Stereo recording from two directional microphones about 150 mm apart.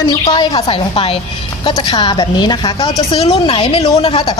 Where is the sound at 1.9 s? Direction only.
30° left (ahead or behind).